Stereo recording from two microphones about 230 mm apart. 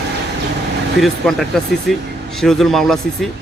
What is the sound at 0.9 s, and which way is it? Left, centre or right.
Speech, centre.